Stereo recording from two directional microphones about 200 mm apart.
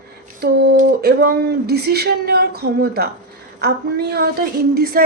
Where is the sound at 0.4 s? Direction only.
50° right (ahead or behind).